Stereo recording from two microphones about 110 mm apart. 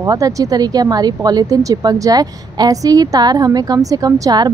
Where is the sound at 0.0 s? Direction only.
30° right (ahead or behind).